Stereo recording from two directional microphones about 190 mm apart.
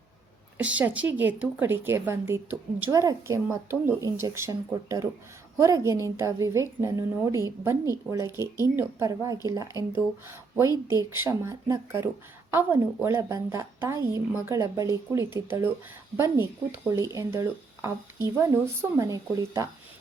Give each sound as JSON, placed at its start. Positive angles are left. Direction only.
{"t": 0.6, "sound": "a woman's voice", "side_deg": -5}
{"t": 10.8, "sound": "a woman's voice", "side_deg": -15}